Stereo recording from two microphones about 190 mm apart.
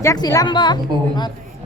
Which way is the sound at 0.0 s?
15° left (ahead or behind).